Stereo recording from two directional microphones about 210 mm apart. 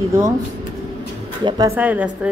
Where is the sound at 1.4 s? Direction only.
20° right (ahead or behind).